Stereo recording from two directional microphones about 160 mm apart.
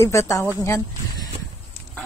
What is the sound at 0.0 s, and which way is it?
Speech, 20° left (ahead or behind).